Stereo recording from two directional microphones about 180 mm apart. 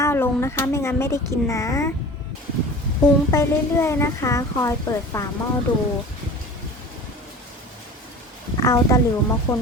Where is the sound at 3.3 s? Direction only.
15° left (ahead or behind).